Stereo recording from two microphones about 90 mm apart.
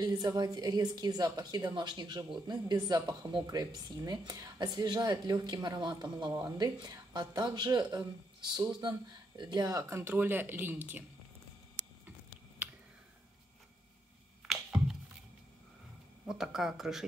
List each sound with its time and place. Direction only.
0.0 s a woman's voice: 50° right (ahead or behind)
6.3 s speech: 40° right (ahead or behind)
6.8 s a woman's voice: 50° right (ahead or behind); by 11.1 s 20° right (ahead or behind)
14.5 s a sound: 5° right (ahead or behind)
16.3 s speech: 5° right (ahead or behind)